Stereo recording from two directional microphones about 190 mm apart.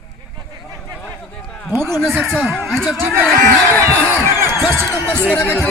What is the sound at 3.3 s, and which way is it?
Speech, 15° left (ahead or behind).